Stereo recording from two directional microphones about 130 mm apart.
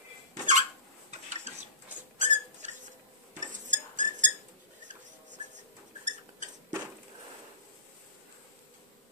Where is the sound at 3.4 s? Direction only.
70° right (ahead or behind).